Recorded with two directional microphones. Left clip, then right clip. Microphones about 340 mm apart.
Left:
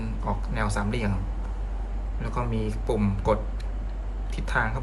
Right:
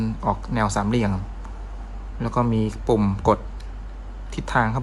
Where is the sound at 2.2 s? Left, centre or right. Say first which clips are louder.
Right 8 dB; centre.